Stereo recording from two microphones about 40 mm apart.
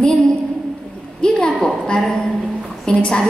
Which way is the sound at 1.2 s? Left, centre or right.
Left.